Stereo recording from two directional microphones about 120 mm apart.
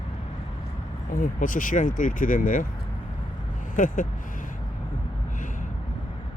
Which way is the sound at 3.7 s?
90° left.